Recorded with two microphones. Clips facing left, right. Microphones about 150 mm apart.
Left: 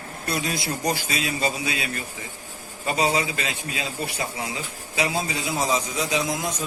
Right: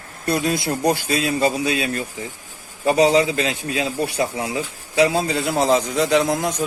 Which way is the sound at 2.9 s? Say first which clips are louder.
Right 8 dB; 70° right (ahead or behind).